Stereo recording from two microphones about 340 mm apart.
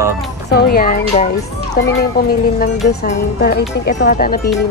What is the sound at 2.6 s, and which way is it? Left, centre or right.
Speech, left.